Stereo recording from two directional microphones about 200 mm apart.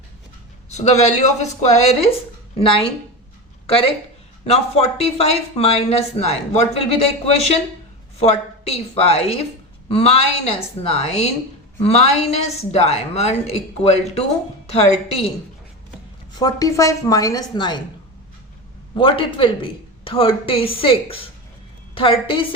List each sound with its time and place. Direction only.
0.7 s a woman's voice: 35° left (ahead or behind)
8.2 s a woman's voice: 30° left (ahead or behind)
16.4 s a woman's voice: 20° left (ahead or behind)
18.9 s a woman's voice: 25° left (ahead or behind)